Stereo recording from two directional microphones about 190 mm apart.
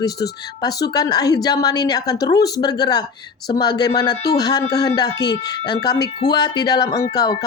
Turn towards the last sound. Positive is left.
turn(degrees=20)  # may be behind; listen again after turning